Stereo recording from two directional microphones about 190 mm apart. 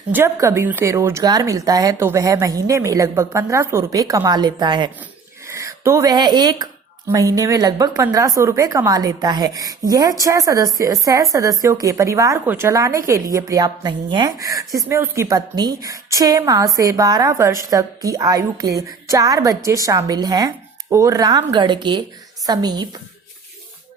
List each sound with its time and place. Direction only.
0.1 s a woman's voice: 15° right (ahead or behind)